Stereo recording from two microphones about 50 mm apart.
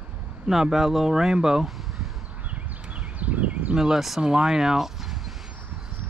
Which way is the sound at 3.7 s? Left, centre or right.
Centre.